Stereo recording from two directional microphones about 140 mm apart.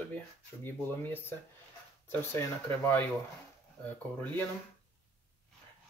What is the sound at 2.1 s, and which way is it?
Speech, 15° left (ahead or behind).